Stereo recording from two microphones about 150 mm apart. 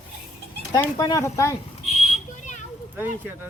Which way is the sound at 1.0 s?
25° left (ahead or behind).